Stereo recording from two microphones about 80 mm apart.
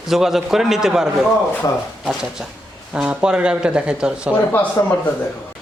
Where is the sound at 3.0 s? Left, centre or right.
Centre.